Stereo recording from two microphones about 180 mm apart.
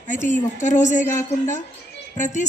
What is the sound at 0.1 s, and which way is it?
A woman's voice, 45° left (ahead or behind).